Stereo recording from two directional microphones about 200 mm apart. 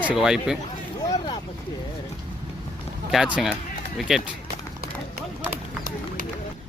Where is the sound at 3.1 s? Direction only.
5° right (ahead or behind).